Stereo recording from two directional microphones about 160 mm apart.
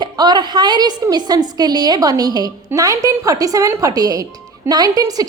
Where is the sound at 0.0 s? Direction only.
25° right (ahead or behind).